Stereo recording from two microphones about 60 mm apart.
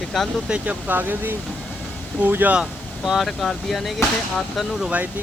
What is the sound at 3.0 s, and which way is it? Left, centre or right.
Speech, centre.